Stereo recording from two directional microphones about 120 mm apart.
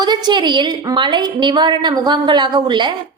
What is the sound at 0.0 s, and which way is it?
A woman's voice, 35° right (ahead or behind).